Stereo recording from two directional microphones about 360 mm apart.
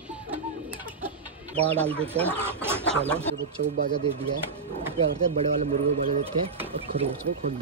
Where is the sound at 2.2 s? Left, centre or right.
Centre.